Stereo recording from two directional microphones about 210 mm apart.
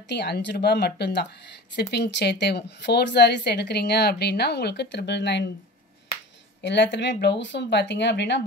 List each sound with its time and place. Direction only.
0.1 s a woman's voice: 55° left (ahead or behind)
6.6 s speech: 55° left (ahead or behind)